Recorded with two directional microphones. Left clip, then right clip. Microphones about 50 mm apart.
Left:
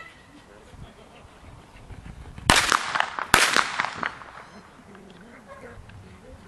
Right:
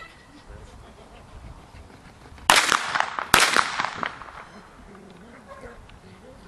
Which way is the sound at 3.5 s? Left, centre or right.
Left.